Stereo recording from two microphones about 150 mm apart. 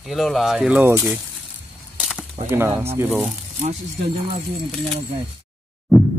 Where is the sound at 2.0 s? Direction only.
Centre (ahead or behind).